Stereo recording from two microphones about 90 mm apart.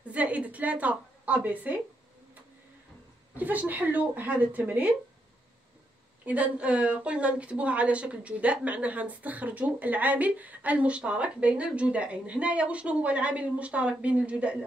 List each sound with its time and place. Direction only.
0.1 s a woman's voice: 15° right (ahead or behind)
3.3 s speech: 20° right (ahead or behind)
6.2 s a woman's voice: 15° right (ahead or behind)